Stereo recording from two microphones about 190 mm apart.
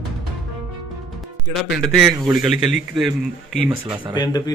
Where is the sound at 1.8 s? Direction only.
Centre (ahead or behind).